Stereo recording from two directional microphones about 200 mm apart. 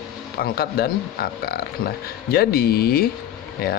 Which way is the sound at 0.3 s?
50° left (ahead or behind).